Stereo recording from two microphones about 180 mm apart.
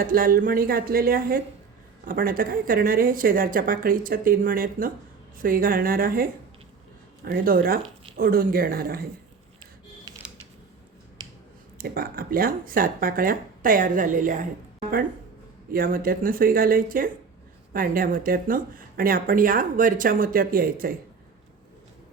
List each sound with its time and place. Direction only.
0.0 s speech: 50° right (ahead or behind)
7.3 s speech: 55° right (ahead or behind)
11.8 s speech: 55° right (ahead or behind)
15.7 s speech: 55° right (ahead or behind)